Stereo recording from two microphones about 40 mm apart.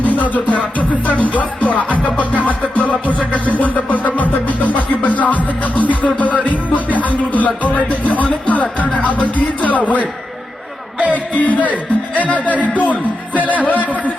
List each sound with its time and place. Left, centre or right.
0.0 s music: left
11.1 s music: left
12.9 s music: right
13.5 s music: left